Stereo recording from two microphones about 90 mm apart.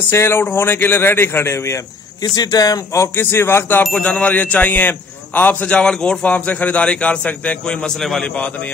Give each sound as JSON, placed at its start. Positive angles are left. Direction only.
{"t": 0.1, "sound": "a man's voice", "side_deg": 25}
{"t": 2.2, "sound": "a man's voice", "side_deg": 45}